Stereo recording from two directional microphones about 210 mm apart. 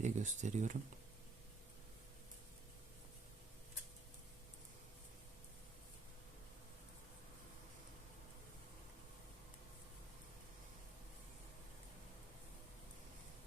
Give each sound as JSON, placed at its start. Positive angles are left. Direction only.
{"t": 0.0, "sound": "speech", "side_deg": -35}